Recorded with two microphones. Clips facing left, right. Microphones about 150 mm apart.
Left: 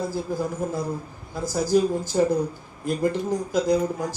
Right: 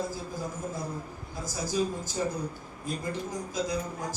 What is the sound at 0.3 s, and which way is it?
Speech, 75° left (ahead or behind).